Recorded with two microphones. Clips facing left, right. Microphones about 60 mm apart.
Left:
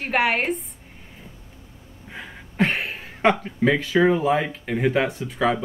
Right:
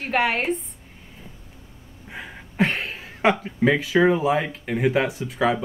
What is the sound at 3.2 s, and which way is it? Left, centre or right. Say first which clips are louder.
Speech: even; centre.